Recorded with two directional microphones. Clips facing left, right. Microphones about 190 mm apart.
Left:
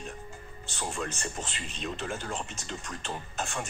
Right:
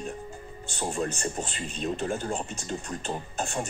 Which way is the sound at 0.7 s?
35° right (ahead or behind).